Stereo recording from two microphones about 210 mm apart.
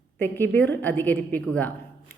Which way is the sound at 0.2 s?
10° left (ahead or behind).